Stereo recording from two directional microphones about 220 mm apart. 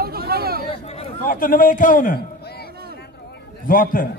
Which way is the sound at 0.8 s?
30° left (ahead or behind).